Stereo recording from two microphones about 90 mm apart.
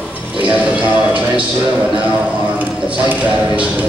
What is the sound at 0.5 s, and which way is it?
Music, 10° right (ahead or behind).